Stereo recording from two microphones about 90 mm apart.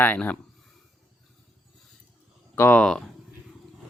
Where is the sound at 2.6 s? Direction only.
15° left (ahead or behind).